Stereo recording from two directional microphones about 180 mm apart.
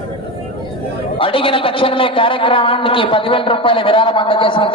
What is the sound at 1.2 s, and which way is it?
A man's voice, 30° left (ahead or behind).